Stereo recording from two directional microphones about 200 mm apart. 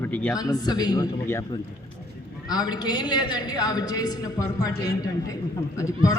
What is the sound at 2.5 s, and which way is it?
A man's voice, 20° left (ahead or behind).